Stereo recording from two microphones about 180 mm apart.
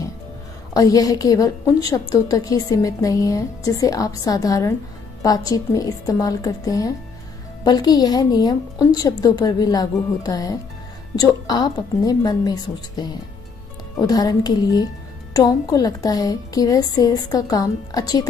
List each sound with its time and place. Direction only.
0.7 s a woman's voice: 20° left (ahead or behind)